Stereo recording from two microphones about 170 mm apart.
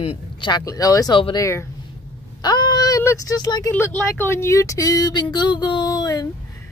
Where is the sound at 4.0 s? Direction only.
15° left (ahead or behind).